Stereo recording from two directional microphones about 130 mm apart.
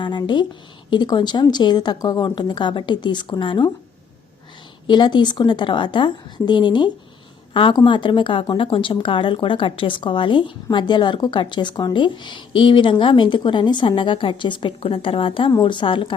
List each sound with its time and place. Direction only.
0.0 s speech: 35° left (ahead or behind)
4.9 s a woman's voice: 35° left (ahead or behind)